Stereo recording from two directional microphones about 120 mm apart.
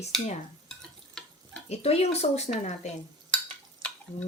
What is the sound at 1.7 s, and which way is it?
Speech, 60° left (ahead or behind).